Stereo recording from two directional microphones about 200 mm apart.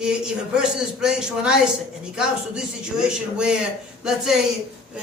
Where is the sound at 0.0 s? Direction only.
5° right (ahead or behind).